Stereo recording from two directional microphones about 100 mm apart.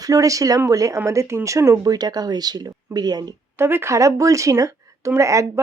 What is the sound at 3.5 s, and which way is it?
Speech, 25° right (ahead or behind).